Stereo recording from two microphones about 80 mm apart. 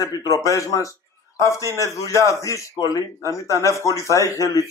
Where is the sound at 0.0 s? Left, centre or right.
Left.